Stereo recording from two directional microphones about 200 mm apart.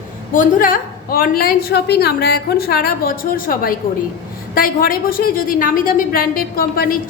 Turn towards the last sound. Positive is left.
turn(degrees=45)  # may be behind; listen again after turning